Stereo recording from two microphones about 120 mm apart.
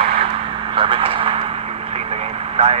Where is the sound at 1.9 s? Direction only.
60° right (ahead or behind).